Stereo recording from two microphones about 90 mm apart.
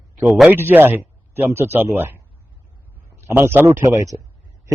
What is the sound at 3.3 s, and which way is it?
Speech, 25° right (ahead or behind).